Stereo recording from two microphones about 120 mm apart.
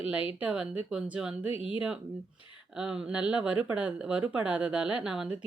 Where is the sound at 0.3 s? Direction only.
10° right (ahead or behind).